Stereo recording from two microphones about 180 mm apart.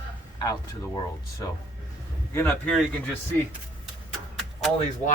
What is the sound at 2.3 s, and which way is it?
Speech, 10° left (ahead or behind).